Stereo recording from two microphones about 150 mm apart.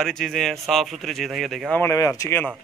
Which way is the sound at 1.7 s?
20° left (ahead or behind).